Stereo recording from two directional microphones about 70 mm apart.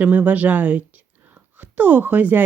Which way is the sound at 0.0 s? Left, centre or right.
Right.